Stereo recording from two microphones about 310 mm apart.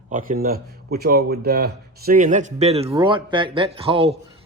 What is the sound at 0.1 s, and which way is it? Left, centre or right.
Speech, right.